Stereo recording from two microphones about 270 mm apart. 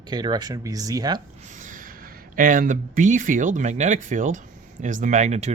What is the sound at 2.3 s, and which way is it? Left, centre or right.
Speech, right.